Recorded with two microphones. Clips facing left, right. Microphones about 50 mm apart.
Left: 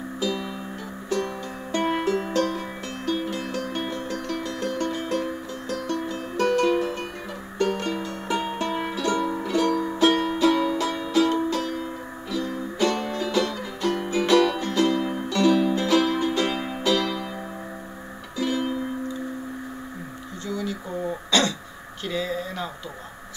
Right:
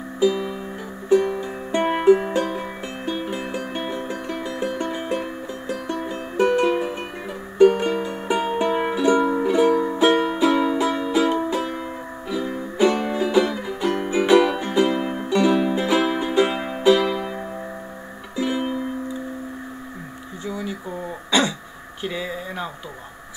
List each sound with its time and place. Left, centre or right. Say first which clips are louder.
0.2 s music: right 8 dB; centre
18.3 s music: right 2 dB; centre
20.4 s throat clearing: right 1 dB; centre
22.0 s a sound: even; centre